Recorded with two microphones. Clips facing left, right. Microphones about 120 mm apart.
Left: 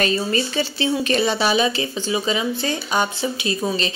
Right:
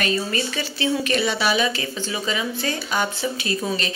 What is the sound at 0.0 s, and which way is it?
Speech, 30° left (ahead or behind).